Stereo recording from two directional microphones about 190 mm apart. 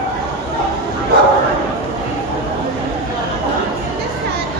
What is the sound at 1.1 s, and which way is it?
Bow-wow, 60° right (ahead or behind).